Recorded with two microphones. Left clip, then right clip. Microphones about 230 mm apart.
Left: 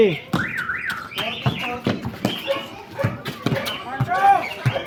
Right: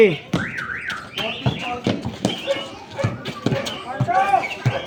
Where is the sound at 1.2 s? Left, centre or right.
Centre.